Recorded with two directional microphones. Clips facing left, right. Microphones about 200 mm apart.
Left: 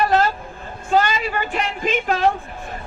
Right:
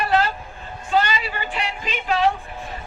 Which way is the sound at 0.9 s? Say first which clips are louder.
Left 3 dB; 45° left (ahead or behind).